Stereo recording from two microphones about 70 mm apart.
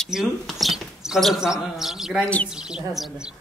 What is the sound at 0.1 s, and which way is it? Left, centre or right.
Speech, centre.